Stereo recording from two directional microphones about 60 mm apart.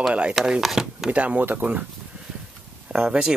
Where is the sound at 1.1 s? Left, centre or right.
Right.